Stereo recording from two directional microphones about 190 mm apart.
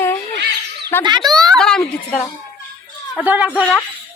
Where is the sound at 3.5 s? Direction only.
5° left (ahead or behind).